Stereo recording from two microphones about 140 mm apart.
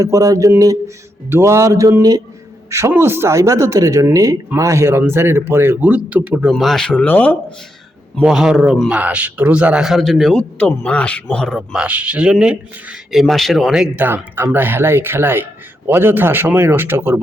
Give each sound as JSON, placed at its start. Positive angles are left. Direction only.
{"t": 0.0, "sound": "speech", "side_deg": -25}
{"t": 6.5, "sound": "speech", "side_deg": 0}
{"t": 8.2, "sound": "a man's voice", "side_deg": -5}
{"t": 11.8, "sound": "speech", "side_deg": -10}